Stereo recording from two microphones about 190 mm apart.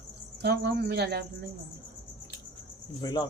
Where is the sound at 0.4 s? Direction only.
60° right (ahead or behind).